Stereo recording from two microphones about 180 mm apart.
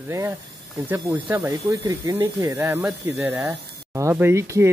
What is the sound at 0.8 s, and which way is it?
A child's voice, 10° right (ahead or behind).